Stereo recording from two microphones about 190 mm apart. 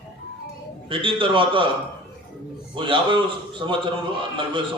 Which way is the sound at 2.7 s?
25° right (ahead or behind).